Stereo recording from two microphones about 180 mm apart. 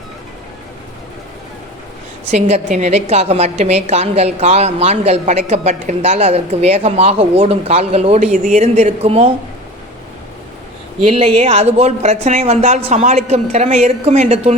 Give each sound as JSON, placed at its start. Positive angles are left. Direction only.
{"t": 2.3, "sound": "a woman's voice", "side_deg": -40}
{"t": 11.1, "sound": "a woman's voice", "side_deg": -35}